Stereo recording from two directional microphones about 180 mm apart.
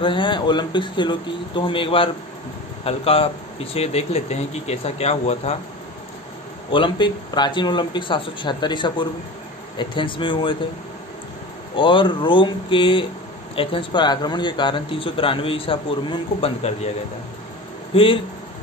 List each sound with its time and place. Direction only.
0.0 s speech: 25° left (ahead or behind)
6.7 s speech: 25° left (ahead or behind)
11.7 s speech: 25° left (ahead or behind)
17.9 s speech: 30° left (ahead or behind)